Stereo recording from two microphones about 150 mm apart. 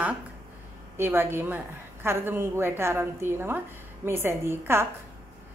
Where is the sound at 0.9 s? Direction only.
15° right (ahead or behind).